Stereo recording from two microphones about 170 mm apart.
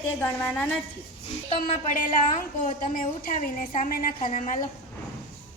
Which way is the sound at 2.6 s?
55° left (ahead or behind).